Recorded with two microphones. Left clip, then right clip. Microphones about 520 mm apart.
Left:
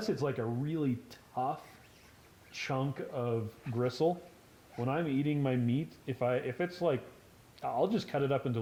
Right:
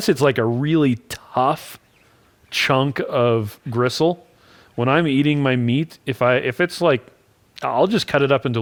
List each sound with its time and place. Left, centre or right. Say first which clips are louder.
0.0 s speech: right 17 dB; right
3.8 s speech: right 13 dB; right
4.8 s speech: right 16 dB; right